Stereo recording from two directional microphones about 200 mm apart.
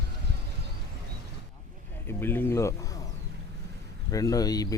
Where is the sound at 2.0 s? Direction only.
10° left (ahead or behind).